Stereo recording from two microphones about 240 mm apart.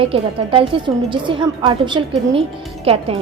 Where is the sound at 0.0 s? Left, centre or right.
Right.